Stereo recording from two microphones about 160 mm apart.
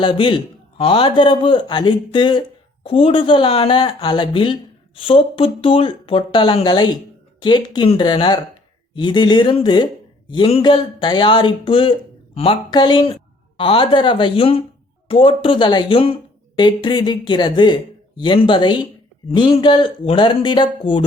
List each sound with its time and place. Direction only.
0.0 s speech: 30° left (ahead or behind)